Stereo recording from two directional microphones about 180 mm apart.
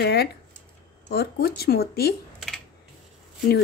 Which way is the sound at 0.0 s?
60° left (ahead or behind).